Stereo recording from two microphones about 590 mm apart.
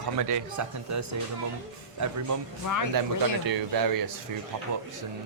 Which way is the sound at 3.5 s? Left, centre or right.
Right.